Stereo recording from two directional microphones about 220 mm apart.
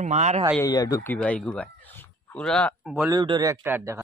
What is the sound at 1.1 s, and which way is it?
Speech, 5° left (ahead or behind).